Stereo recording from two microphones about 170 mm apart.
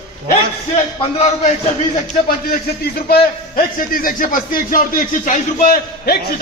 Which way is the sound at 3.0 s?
65° left (ahead or behind).